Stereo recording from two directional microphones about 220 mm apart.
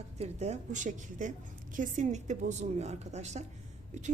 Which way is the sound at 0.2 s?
30° right (ahead or behind).